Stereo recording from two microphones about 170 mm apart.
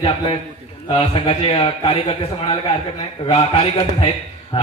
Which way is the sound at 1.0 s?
35° left (ahead or behind).